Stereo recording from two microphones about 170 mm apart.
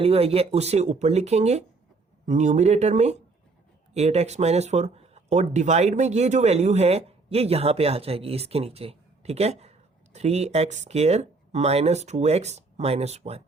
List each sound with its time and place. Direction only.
0.0 s speech: 35° right (ahead or behind)